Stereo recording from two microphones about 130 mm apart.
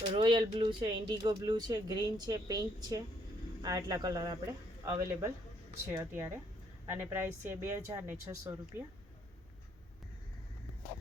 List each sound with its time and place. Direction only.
0.0 s a woman's voice: 40° right (ahead or behind); by 8.5 s 20° right (ahead or behind)